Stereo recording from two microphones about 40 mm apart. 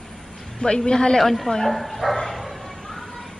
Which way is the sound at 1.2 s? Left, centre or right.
Centre.